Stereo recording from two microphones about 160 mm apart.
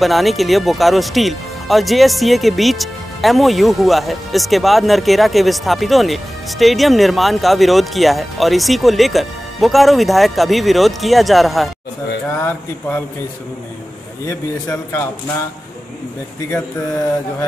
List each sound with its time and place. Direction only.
0.0 s speech: centre (ahead or behind)
12.3 s a man's voice: 10° left (ahead or behind)
14.2 s a man's voice: 15° left (ahead or behind)